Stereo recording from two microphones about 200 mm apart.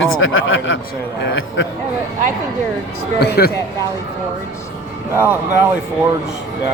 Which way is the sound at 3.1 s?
55° left (ahead or behind).